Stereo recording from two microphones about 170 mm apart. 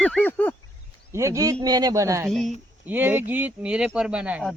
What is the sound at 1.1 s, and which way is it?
Speech, 15° right (ahead or behind).